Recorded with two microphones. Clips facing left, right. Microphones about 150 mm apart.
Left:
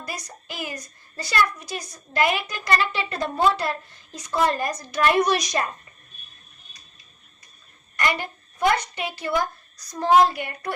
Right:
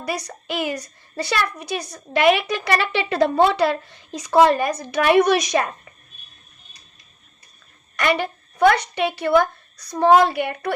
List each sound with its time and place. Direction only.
0.0 s a woman's voice: 70° right (ahead or behind)
7.9 s a woman's voice: 70° right (ahead or behind)